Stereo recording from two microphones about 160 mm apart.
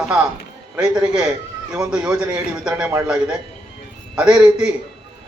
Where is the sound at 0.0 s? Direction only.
5° right (ahead or behind).